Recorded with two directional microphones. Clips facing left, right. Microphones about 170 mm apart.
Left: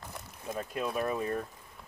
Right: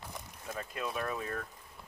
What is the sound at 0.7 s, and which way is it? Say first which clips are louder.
Speech: left 5 dB; 5° left (ahead or behind).